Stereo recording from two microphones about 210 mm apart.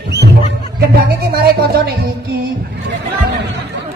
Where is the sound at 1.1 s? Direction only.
50° right (ahead or behind).